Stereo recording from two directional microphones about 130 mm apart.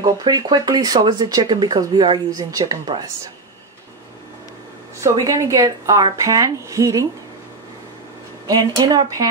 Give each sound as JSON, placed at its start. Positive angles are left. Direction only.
{"t": 0.0, "sound": "speech", "side_deg": -35}
{"t": 5.0, "sound": "speech", "side_deg": -25}
{"t": 8.5, "sound": "speech", "side_deg": -30}